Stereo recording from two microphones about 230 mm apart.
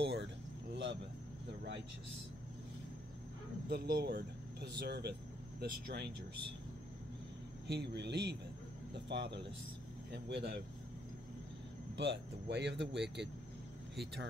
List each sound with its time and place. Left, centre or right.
0.0 s a sound: right
3.6 s speech: right
7.6 s speech: right
10.1 s speech: right
12.0 s speech: right